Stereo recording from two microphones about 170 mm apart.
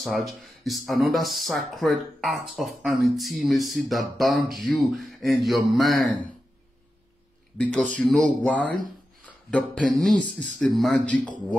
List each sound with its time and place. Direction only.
0.0 s speech: centre (ahead or behind)
7.5 s speech: 5° left (ahead or behind)